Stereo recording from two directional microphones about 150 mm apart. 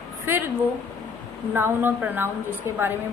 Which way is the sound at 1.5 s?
15° right (ahead or behind).